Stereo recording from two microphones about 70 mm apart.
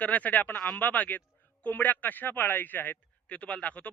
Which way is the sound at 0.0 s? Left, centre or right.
Left.